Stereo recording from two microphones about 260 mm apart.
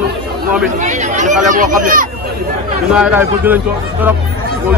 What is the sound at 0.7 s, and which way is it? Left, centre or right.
Speech, right.